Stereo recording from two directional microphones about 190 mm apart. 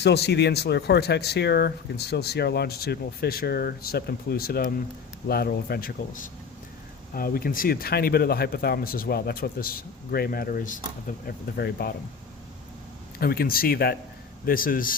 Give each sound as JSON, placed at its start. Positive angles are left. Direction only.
{"t": 0.0, "sound": "speech", "side_deg": 60}
{"t": 13.1, "sound": "speech", "side_deg": 50}